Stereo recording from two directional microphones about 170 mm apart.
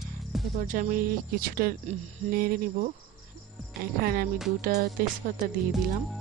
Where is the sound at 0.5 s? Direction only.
50° right (ahead or behind).